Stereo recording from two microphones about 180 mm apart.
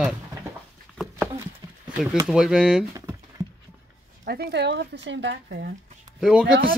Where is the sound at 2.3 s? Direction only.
5° right (ahead or behind).